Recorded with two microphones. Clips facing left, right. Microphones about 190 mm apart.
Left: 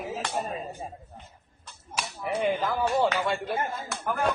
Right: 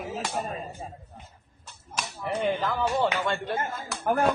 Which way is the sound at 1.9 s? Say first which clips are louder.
Even; 10° left (ahead or behind).